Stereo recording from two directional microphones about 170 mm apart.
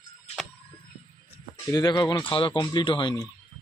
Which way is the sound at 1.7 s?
25° left (ahead or behind).